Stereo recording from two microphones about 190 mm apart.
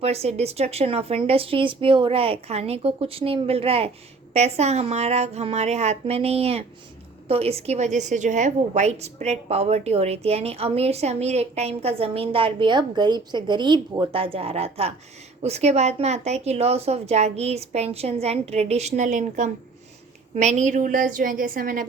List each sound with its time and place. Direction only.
0.0 s a woman's voice: 35° right (ahead or behind)